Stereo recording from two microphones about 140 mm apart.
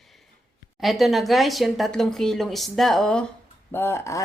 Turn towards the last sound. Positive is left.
turn(degrees=20)  # may be behind; listen again after turning